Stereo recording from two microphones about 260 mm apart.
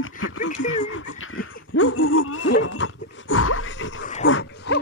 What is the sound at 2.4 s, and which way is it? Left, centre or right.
Wild animals, left.